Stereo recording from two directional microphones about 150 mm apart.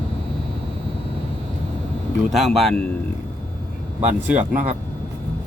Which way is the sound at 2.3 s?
Centre (ahead or behind).